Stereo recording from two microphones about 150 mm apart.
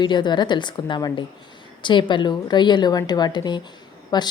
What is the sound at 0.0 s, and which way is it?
A woman's voice, 30° left (ahead or behind).